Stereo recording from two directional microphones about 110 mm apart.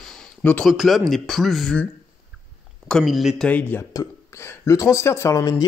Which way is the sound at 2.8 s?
5° left (ahead or behind).